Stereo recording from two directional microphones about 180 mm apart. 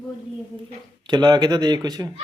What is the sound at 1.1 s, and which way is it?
Speech, 25° right (ahead or behind).